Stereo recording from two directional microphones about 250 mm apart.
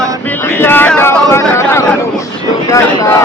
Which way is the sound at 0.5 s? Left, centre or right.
Centre.